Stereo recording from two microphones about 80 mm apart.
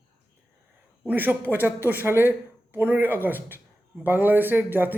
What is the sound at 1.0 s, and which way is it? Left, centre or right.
Speech, right.